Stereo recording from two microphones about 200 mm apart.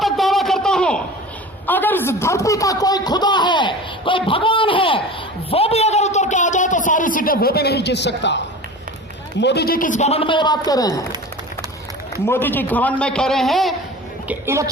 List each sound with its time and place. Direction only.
0.0 s a sound: centre (ahead or behind)
1.6 s a man's voice: 10° left (ahead or behind); by 5.0 s 25° left (ahead or behind)
5.5 s a sound: 30° left (ahead or behind); by 8.4 s 60° left (ahead or behind)
9.4 s a man's voice: 55° left (ahead or behind); by 11.0 s 20° left (ahead or behind)
12.1 s a man's voice: 10° left (ahead or behind)
14.3 s a woman's voice: 15° right (ahead or behind)